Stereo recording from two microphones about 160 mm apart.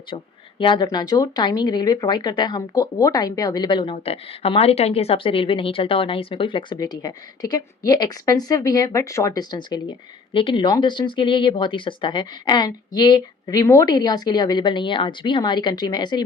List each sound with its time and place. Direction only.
0.6 s speech: 30° left (ahead or behind)